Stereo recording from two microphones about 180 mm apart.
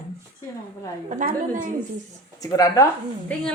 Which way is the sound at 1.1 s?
45° right (ahead or behind).